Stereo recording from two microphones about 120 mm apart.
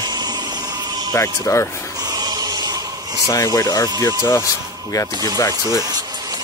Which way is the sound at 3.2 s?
30° left (ahead or behind).